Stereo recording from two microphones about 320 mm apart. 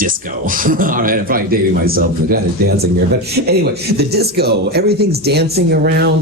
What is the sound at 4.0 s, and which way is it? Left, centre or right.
Speech, right.